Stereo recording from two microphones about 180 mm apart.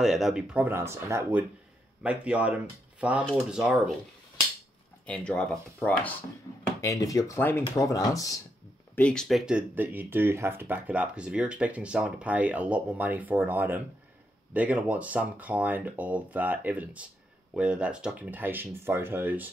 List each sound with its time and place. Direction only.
0.0 s speech: centre (ahead or behind)
5.0 s speech: 5° left (ahead or behind)
6.8 s speech: 20° left (ahead or behind)
8.9 s speech: 5° left (ahead or behind); by 19.5 s 10° right (ahead or behind)